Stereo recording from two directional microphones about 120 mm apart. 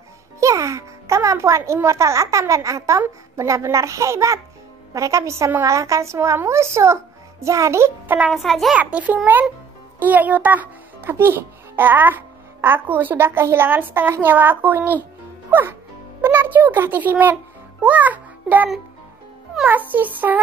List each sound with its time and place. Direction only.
0.4 s music: 25° right (ahead or behind)
1.6 s a child's voice: 20° right (ahead or behind)
8.3 s a child's voice: centre (ahead or behind)
8.7 s a child's voice: 10° right (ahead or behind)
16.2 s a child's voice: 15° right (ahead or behind)